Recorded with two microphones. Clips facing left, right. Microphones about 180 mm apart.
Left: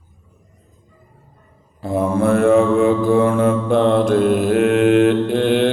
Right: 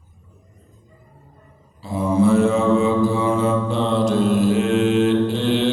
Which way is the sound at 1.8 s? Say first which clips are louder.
Left 1 dB; 55° left (ahead or behind).